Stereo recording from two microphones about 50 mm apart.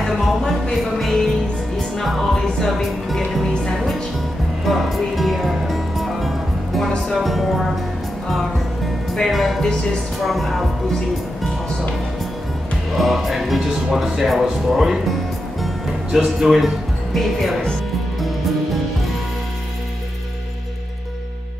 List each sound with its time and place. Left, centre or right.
0.0 s music: centre
7.1 s speech: centre
9.1 s speech: centre
12.9 s speech: centre
16.3 s speech: centre